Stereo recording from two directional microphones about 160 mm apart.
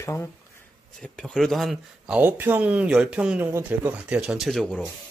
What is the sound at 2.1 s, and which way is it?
Speech, 10° right (ahead or behind).